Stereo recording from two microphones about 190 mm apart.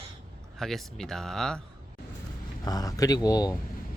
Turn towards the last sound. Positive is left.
turn(degrees=20)  # may be behind; listen again after turning